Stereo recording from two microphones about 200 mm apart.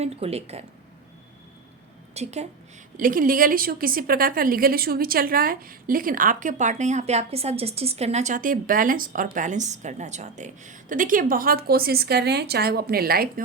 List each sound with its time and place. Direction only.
0.0 s speech: 30° right (ahead or behind)
2.1 s speech: 35° right (ahead or behind)
3.0 s a woman's voice: 45° right (ahead or behind)